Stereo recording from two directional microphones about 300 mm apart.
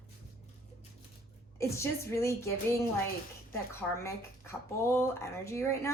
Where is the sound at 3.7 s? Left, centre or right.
Centre.